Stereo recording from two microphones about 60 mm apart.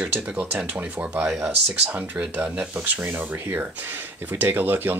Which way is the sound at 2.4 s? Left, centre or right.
Right.